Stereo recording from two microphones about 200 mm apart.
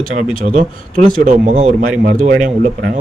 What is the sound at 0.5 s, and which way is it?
A man's voice, 40° right (ahead or behind).